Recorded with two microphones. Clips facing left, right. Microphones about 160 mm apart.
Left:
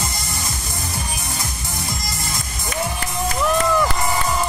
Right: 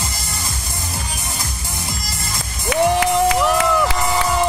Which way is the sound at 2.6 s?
80° right.